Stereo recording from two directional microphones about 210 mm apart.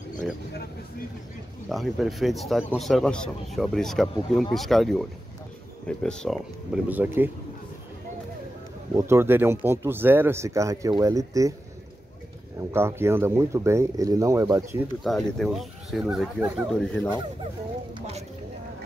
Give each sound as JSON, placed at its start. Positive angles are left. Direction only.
{"t": 1.7, "sound": "speech", "side_deg": 0}
{"t": 8.9, "sound": "speech", "side_deg": -10}
{"t": 12.7, "sound": "speech", "side_deg": -10}
{"t": 15.0, "sound": "speech", "side_deg": 0}
{"t": 16.6, "sound": "speech", "side_deg": 5}
{"t": 17.9, "sound": "speech", "side_deg": -30}